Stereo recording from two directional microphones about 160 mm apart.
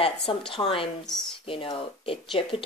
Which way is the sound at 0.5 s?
35° left (ahead or behind).